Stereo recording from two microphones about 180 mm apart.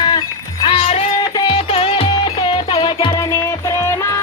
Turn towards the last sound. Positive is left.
turn(degrees=25)  # may be behind; listen again after turning